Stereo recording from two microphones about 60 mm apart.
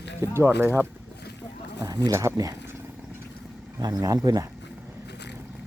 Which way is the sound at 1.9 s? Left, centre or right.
Right.